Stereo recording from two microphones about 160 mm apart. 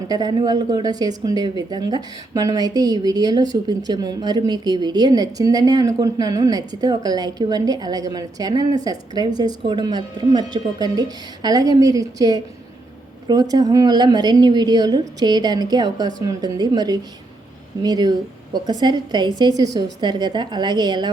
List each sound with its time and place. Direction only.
0.1 s a woman's voice: 25° right (ahead or behind)